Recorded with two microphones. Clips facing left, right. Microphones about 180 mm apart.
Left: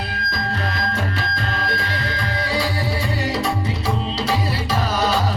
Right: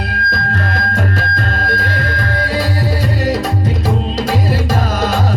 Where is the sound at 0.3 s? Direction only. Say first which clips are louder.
Right 4 dB; 50° right (ahead or behind).